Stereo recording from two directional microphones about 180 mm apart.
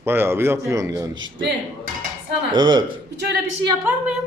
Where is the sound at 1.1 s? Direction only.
90° right.